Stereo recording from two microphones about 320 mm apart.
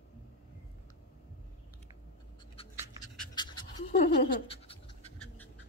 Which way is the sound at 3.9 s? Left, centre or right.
Left.